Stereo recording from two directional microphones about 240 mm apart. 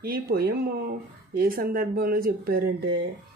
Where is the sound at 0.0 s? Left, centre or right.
Right.